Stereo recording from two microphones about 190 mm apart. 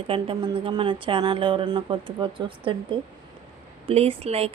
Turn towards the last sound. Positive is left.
turn(degrees=-30)  # may be behind; listen again after turning